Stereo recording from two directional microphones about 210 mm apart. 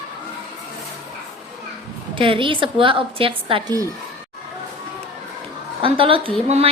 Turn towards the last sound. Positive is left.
turn(degrees=-30)  # may be behind; listen again after turning